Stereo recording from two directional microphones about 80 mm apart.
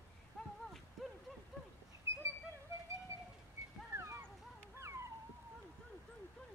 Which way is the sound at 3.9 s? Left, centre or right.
Right.